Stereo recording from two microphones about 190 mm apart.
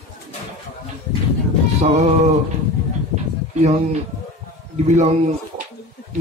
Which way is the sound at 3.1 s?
40° right (ahead or behind).